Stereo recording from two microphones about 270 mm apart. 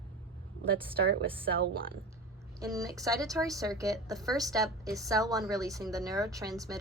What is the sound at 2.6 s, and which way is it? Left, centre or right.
A woman's voice, centre.